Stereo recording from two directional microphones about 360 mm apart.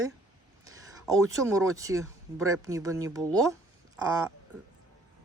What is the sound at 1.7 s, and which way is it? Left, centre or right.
Speech, centre.